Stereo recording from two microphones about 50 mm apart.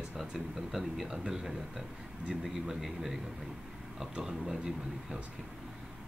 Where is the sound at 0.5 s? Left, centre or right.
Centre.